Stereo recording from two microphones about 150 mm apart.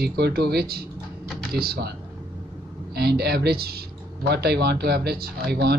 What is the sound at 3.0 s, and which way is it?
Speech, 90° right.